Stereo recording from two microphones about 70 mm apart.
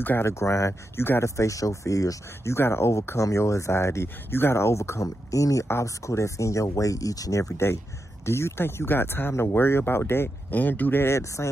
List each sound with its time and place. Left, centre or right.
0.0 s speech: left
0.3 s speech: left
1.2 s speech: left
2.5 s speech: left